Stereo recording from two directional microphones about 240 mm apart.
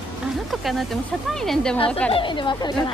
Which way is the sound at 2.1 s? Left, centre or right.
Left.